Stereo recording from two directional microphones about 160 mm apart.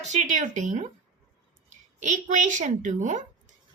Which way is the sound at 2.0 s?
50° right (ahead or behind).